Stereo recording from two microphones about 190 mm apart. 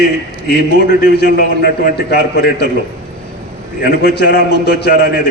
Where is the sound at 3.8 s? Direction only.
60° left (ahead or behind).